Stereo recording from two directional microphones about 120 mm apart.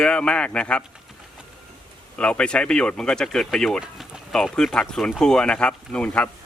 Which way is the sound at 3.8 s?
5° right (ahead or behind).